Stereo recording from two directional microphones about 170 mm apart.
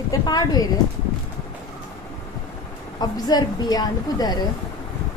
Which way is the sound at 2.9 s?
25° left (ahead or behind).